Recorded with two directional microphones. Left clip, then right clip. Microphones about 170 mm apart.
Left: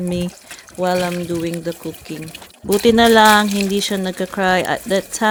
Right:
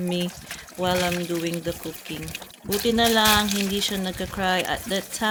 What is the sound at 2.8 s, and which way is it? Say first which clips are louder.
Speech: left 9 dB; 45° left (ahead or behind).